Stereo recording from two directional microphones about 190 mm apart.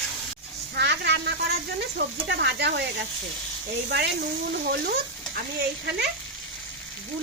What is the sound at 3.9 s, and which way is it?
Speech, 65° right (ahead or behind).